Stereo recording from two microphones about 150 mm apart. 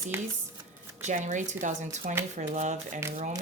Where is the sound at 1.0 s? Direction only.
55° right (ahead or behind).